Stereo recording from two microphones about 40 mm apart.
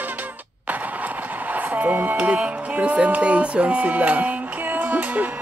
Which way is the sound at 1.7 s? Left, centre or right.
Right.